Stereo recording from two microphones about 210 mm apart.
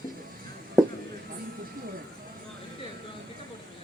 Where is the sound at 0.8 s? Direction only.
15° right (ahead or behind).